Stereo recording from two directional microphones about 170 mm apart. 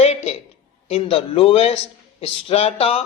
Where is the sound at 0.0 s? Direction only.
40° left (ahead or behind).